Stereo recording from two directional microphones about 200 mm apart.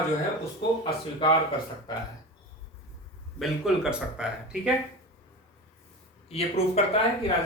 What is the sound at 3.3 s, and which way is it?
Speech, centre (ahead or behind).